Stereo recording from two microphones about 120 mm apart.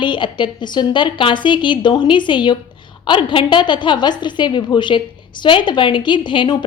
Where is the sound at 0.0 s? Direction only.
40° left (ahead or behind).